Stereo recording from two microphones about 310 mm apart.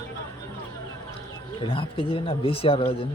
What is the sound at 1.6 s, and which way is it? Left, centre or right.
Speech, centre.